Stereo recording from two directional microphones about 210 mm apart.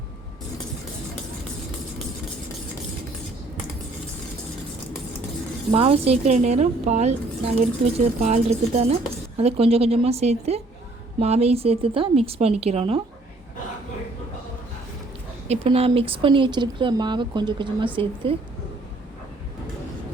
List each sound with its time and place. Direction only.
5.7 s a woman's voice: 30° right (ahead or behind)
15.4 s speech: 30° right (ahead or behind)